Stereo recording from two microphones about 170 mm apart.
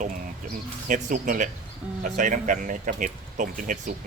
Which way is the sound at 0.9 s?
50° right (ahead or behind).